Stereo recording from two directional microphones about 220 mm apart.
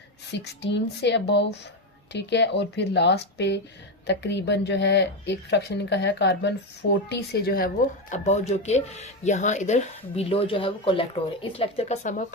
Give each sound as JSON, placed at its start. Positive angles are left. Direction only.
{"t": 0.3, "sound": "a woman's voice", "side_deg": 50}
{"t": 8.1, "sound": "speech", "side_deg": 30}